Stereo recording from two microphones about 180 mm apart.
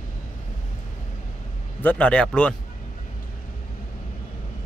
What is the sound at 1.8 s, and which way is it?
Speech, 10° left (ahead or behind).